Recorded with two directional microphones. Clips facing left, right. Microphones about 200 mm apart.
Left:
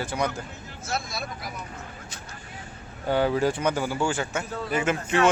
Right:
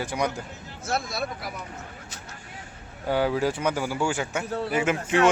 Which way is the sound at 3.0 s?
5° right (ahead or behind).